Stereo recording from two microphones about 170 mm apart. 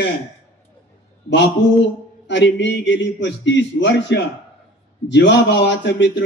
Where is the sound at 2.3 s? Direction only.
90° left.